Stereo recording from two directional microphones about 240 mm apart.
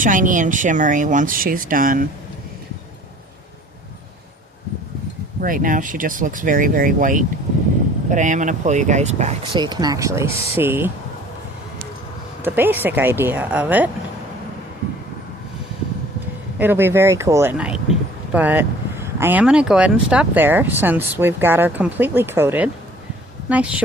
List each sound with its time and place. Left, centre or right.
0.0 s speech: right
5.4 s speech: right
9.6 s speech: centre
12.4 s speech: centre
16.6 s speech: centre